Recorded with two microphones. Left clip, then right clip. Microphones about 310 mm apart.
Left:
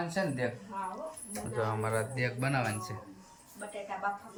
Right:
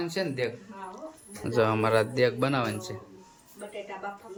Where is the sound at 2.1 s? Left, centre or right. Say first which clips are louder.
Right 8 dB; centre.